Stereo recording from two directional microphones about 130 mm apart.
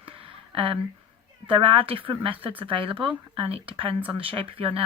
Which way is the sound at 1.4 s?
40° right (ahead or behind).